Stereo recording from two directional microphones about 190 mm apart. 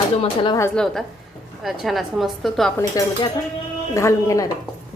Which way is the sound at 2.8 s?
20° left (ahead or behind).